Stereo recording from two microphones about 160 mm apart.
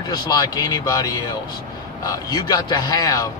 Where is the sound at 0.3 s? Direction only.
25° left (ahead or behind).